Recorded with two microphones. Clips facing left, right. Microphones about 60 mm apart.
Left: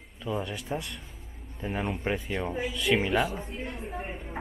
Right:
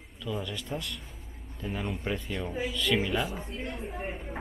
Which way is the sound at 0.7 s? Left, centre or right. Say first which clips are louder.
Left 2 dB; centre.